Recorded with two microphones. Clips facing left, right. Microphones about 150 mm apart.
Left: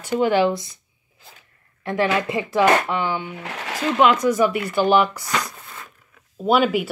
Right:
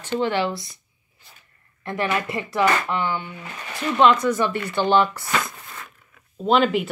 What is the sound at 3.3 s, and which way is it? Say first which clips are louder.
Speech: left 5 dB; 80° left.